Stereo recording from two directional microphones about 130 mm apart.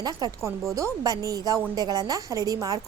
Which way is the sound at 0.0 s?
30° right (ahead or behind).